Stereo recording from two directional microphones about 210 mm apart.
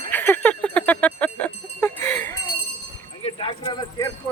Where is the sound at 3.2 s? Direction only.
25° left (ahead or behind).